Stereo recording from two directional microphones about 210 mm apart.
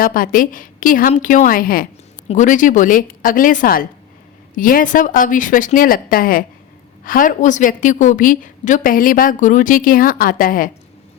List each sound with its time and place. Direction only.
0.0 s a woman's voice: 40° left (ahead or behind)